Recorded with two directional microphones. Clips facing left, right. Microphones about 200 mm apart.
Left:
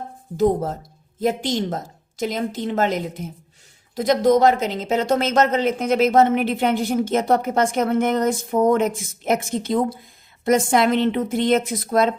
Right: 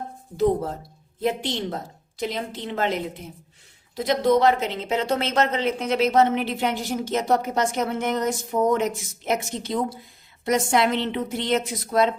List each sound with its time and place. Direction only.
0.3 s a woman's voice: 45° left (ahead or behind)